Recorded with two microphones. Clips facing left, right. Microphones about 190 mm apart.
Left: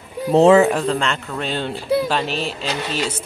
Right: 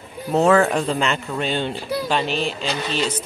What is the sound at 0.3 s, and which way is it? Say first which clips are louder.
Speech: left 5 dB; 30° left (ahead or behind).